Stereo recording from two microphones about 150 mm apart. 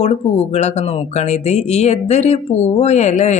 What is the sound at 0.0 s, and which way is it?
Speech, 45° left (ahead or behind).